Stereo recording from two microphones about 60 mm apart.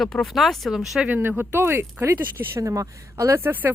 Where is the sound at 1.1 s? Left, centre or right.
Right.